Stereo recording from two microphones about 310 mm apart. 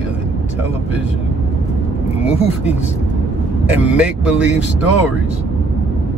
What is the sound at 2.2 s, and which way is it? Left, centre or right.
Speech, centre.